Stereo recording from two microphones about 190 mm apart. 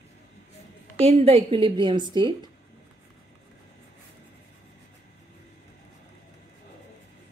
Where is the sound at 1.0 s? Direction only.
30° right (ahead or behind).